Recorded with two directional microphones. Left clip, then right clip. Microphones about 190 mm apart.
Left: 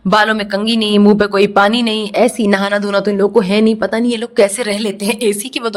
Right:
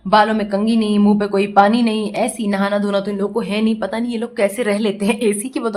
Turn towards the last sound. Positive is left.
turn(degrees=40)  # may be behind; listen again after turning